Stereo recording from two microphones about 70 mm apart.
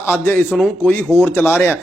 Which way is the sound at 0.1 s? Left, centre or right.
Left.